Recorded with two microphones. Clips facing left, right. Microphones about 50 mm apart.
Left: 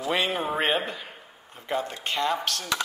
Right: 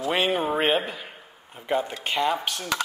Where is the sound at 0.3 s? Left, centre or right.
Centre.